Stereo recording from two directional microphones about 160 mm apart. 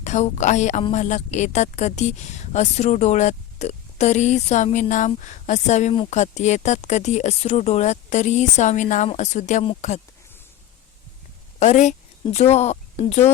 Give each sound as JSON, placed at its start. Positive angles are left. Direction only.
{"t": 0.0, "sound": "speech", "side_deg": 45}
{"t": 11.6, "sound": "speech", "side_deg": 45}